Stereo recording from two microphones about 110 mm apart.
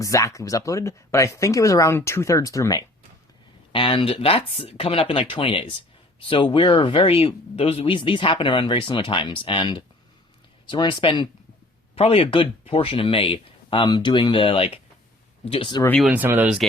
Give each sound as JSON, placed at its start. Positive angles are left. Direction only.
{"t": 0.0, "sound": "speech", "side_deg": 30}
{"t": 3.7, "sound": "speech", "side_deg": 50}
{"t": 11.9, "sound": "speech", "side_deg": 65}
{"t": 16.0, "sound": "speech", "side_deg": -15}